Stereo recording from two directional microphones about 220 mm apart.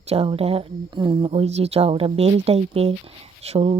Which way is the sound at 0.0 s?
25° right (ahead or behind).